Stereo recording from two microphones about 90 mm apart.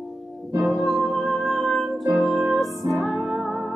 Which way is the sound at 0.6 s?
Centre (ahead or behind).